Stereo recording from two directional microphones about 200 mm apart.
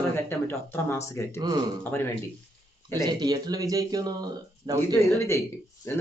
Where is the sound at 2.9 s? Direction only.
20° right (ahead or behind).